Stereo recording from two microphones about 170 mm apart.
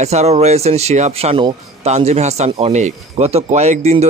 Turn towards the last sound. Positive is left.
turn(degrees=-40)  # may be behind; listen again after turning